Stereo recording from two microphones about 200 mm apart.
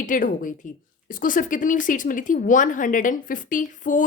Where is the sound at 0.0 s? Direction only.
40° left (ahead or behind).